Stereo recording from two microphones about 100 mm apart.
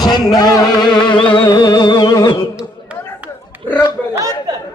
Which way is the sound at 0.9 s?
55° left (ahead or behind).